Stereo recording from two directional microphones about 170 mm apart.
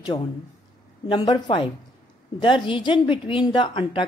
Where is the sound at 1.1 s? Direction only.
30° left (ahead or behind).